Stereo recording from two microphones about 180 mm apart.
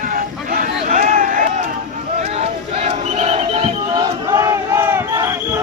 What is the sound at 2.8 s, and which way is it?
Battle cry, 35° right (ahead or behind).